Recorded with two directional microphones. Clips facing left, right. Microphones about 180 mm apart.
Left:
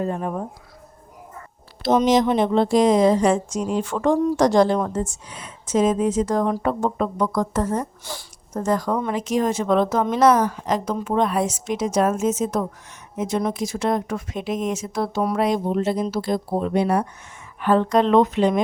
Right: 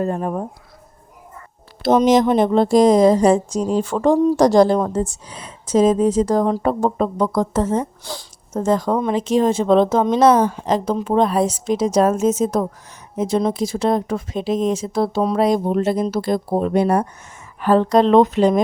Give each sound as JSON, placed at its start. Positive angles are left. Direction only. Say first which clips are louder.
{"t": 0.0, "sound": "speech", "louder": "right 3 dB", "side_deg": -45}
{"t": 1.8, "sound": "a woman's voice", "louder": "right 3 dB", "side_deg": -50}
{"t": 15.4, "sound": "a woman's voice", "louder": "right 4 dB", "side_deg": -50}